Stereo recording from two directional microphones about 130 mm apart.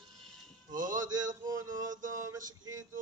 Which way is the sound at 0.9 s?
30° right (ahead or behind).